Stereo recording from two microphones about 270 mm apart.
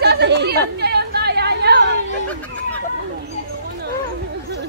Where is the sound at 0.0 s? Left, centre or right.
Right.